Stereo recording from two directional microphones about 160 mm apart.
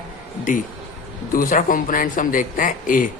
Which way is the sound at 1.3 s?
60° left (ahead or behind).